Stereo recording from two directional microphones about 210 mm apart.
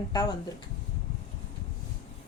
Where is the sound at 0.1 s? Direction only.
15° left (ahead or behind).